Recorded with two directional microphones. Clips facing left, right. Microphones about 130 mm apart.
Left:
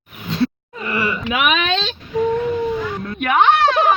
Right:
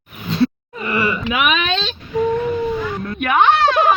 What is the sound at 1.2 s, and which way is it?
Whimper, 60° left (ahead or behind).